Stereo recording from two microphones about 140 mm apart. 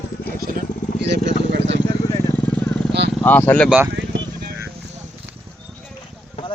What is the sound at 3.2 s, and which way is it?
Speech, 15° left (ahead or behind).